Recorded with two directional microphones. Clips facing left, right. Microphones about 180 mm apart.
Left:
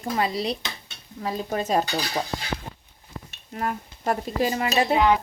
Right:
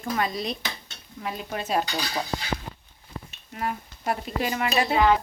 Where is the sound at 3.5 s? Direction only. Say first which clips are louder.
Left 2 dB; 40° left (ahead or behind).